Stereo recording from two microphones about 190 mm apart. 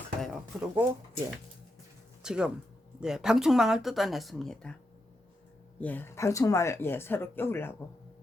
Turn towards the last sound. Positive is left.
turn(degrees=10)  # may be behind; listen again after turning